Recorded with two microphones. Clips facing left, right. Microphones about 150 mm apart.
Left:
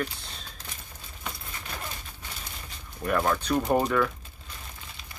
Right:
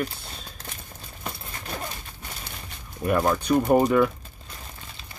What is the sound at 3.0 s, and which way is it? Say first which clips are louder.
Speech: right 3 dB; 15° right (ahead or behind).